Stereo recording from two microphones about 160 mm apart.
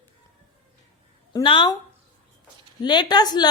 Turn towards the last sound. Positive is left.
turn(degrees=25)  # may be behind; listen again after turning